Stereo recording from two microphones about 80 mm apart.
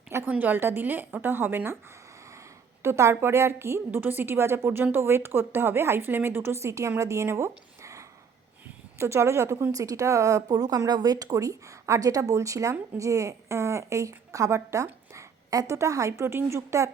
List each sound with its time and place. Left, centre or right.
0.3 s a woman's voice: right
2.8 s a woman's voice: right
15.1 s a sound: right
15.7 s a woman's voice: right